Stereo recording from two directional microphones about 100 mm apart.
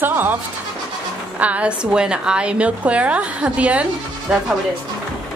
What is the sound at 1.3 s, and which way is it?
A woman's voice, 15° right (ahead or behind).